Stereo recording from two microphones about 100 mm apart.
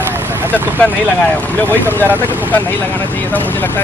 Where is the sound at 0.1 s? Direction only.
20° right (ahead or behind).